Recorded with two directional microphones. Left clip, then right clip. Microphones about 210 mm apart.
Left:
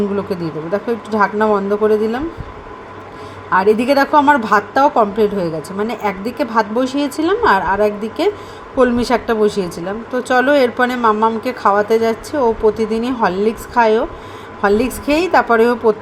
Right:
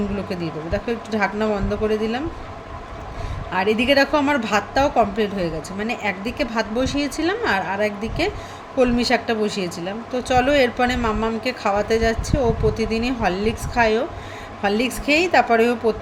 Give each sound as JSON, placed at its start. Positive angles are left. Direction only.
{"t": 0.3, "sound": "speech", "side_deg": 10}
{"t": 3.5, "sound": "speech", "side_deg": 10}